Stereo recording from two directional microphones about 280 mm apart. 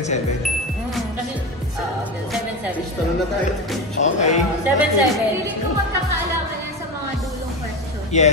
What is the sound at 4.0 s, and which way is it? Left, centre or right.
Speech, left.